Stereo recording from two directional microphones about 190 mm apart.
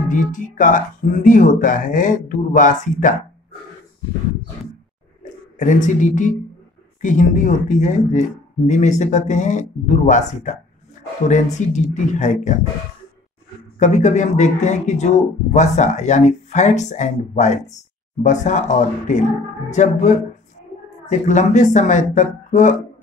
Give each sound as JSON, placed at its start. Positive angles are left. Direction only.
{"t": 0.1, "sound": "speech", "side_deg": 45}
{"t": 5.2, "sound": "speech", "side_deg": 40}
{"t": 13.7, "sound": "speech", "side_deg": 40}